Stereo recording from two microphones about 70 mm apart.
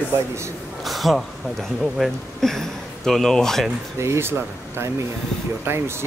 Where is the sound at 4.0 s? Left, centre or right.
Right.